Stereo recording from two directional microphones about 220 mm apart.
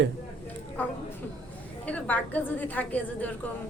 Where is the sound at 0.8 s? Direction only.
10° left (ahead or behind).